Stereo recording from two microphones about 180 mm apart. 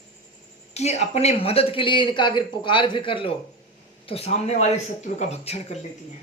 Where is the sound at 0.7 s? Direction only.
35° left (ahead or behind).